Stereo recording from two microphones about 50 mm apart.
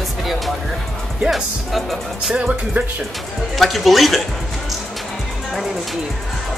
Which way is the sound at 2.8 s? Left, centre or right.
Right.